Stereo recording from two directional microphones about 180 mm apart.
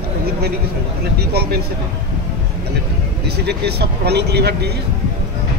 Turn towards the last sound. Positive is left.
turn(degrees=-65)  # may be behind; listen again after turning